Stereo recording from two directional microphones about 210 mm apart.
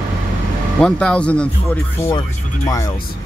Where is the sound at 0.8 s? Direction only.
5° left (ahead or behind).